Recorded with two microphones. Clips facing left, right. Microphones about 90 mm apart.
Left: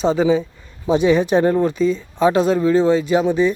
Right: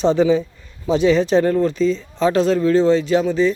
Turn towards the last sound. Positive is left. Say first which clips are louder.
# even
turn(degrees=15)  # may be behind; listen again after turning